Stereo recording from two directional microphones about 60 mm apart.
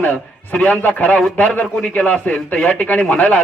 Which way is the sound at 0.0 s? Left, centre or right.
Left.